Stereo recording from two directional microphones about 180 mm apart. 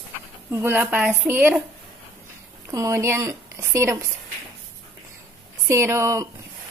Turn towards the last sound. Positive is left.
turn(degrees=-15)  # may be behind; listen again after turning